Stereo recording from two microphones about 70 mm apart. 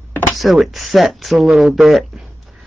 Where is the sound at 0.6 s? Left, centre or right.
Centre.